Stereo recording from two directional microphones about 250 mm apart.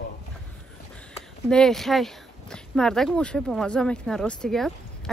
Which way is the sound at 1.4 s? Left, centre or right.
Centre.